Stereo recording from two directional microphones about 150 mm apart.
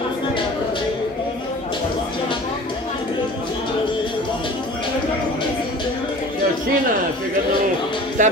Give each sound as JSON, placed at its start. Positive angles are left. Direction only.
{"t": 8.2, "sound": "music", "side_deg": -60}